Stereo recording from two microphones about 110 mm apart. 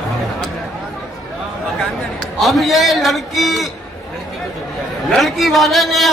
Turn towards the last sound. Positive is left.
turn(degrees=0)  # may be behind; listen again after turning